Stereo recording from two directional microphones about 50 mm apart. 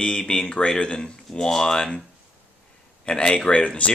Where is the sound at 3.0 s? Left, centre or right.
Centre.